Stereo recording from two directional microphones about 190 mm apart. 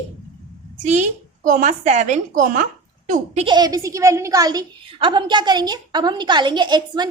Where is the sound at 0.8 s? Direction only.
40° right (ahead or behind).